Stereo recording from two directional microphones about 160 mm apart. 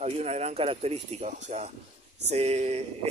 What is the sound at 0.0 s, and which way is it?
Speech, 40° right (ahead or behind).